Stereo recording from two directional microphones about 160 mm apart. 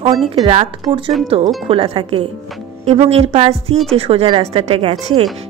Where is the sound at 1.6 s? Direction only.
35° right (ahead or behind).